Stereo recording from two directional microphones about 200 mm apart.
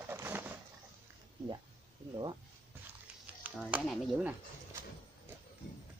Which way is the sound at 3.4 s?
5° right (ahead or behind).